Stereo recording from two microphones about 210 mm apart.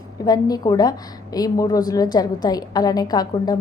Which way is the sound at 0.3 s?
20° left (ahead or behind).